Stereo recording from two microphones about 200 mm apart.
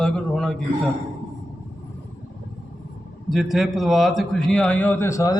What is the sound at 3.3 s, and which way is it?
A man's voice, centre (ahead or behind).